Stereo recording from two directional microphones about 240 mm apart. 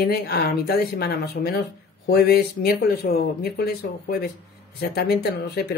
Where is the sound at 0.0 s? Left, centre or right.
Left.